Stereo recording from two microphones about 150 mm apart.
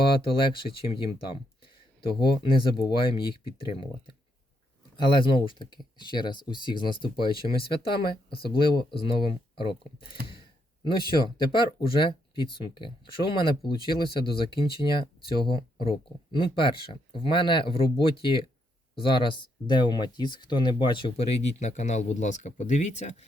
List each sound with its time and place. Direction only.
0.2 s speech: 35° left (ahead or behind)
21.4 s speech: 50° left (ahead or behind)